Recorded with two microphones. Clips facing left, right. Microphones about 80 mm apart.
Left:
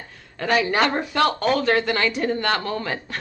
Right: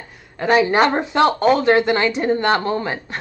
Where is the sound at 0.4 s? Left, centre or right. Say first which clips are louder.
Right 5 dB; right.